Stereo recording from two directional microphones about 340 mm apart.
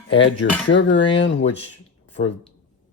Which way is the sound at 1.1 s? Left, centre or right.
Left.